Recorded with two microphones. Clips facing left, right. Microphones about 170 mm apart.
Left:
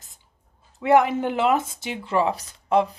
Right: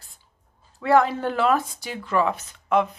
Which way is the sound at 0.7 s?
20° left (ahead or behind).